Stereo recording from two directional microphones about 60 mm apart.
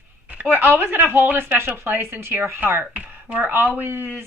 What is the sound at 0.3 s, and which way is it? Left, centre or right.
Speech, right.